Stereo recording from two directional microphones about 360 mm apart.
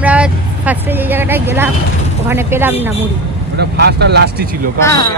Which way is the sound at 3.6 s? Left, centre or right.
Right.